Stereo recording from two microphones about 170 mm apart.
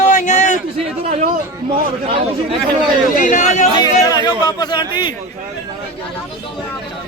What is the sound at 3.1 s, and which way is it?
Speech, 50° left (ahead or behind).